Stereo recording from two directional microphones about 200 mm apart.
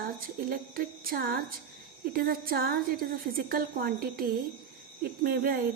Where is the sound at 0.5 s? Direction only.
45° right (ahead or behind).